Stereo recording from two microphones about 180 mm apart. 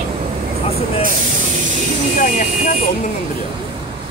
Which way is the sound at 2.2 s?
45° left (ahead or behind).